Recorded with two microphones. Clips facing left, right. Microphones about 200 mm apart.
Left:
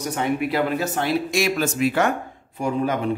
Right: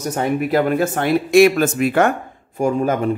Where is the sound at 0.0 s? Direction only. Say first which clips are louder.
Right 3 dB; 45° right (ahead or behind).